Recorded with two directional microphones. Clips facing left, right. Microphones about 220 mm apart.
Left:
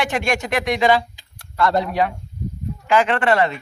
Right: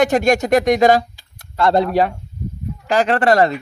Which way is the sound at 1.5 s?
30° right (ahead or behind).